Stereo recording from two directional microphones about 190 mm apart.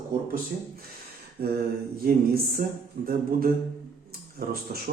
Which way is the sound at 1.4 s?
55° right (ahead or behind).